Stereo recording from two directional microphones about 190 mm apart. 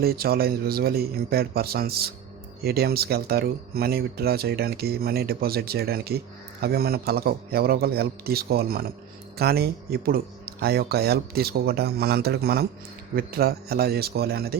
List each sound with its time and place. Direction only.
0.0 s speech: 55° right (ahead or behind)